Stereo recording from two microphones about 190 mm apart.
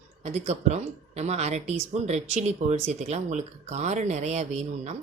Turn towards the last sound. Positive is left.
turn(degrees=-35)  # may be behind; listen again after turning